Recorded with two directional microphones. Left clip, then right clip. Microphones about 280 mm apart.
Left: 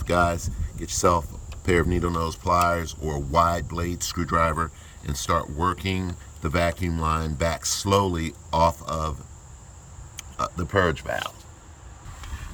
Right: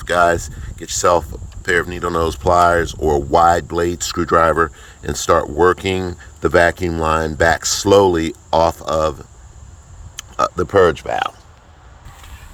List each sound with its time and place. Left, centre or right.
0.0 s speech: centre
10.2 s a sound: centre
11.1 s speech: right